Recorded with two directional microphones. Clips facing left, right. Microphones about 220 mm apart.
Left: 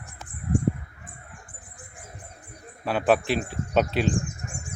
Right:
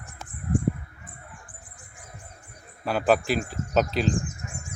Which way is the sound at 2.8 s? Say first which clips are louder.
Even; centre (ahead or behind).